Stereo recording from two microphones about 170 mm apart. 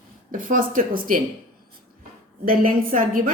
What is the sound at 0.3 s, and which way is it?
Speech, 55° right (ahead or behind).